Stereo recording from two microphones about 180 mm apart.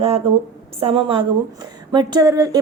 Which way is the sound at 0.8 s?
30° right (ahead or behind).